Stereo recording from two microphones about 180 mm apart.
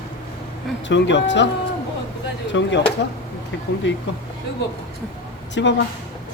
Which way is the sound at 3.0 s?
70° left (ahead or behind).